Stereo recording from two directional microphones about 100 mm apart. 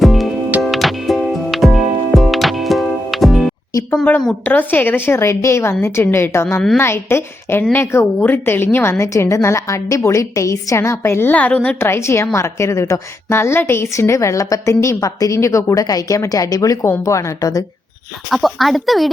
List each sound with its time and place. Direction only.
0.0 s music: centre (ahead or behind)
4.4 s a woman's voice: 20° left (ahead or behind)
11.8 s a woman's voice: 25° left (ahead or behind)
18.3 s speech: centre (ahead or behind)